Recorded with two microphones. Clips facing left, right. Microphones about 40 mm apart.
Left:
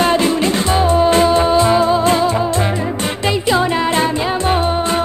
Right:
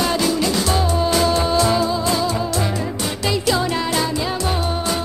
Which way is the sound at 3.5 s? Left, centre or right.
Left.